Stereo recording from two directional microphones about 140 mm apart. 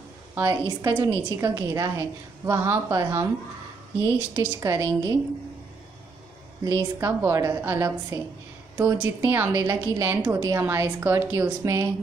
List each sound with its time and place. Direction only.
0.3 s a sound: 20° right (ahead or behind)
0.7 s a woman's voice: 30° right (ahead or behind)
4.6 s a woman's voice: 25° right (ahead or behind)
6.6 s a woman's voice: 25° right (ahead or behind)